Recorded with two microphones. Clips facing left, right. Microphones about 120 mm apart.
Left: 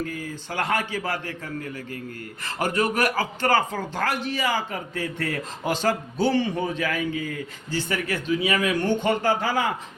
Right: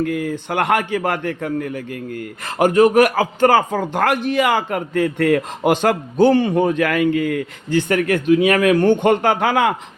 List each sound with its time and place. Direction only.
0.0 s a man's voice: 60° right (ahead or behind)